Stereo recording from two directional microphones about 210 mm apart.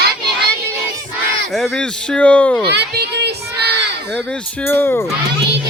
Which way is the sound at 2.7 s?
50° right (ahead or behind).